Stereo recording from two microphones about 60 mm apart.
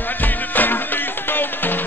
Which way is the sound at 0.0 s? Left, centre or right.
Left.